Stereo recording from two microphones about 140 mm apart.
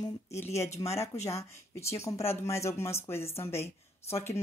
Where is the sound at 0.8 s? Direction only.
20° left (ahead or behind).